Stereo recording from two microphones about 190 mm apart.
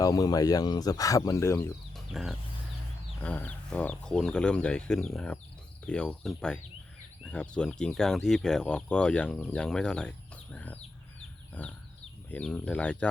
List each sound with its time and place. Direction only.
0.0 s speech: 20° left (ahead or behind)
2.2 s speech: centre (ahead or behind)
11.6 s a sound: 10° left (ahead or behind)
12.3 s speech: 5° left (ahead or behind)